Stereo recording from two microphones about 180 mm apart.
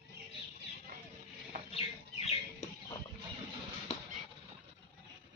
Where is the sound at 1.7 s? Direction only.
35° left (ahead or behind).